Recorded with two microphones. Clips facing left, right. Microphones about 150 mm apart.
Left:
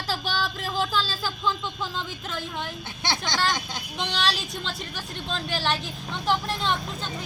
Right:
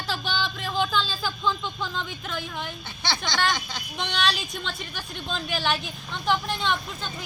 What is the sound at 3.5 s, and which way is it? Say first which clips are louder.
Speech: even; 15° left (ahead or behind).